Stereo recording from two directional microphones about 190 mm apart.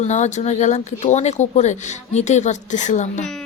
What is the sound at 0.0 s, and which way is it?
Speech, 40° left (ahead or behind).